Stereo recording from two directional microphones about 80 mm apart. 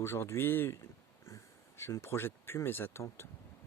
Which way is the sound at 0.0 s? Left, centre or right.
Left.